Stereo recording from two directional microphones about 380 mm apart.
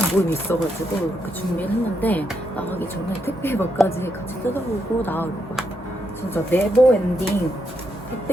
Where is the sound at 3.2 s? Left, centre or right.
Centre.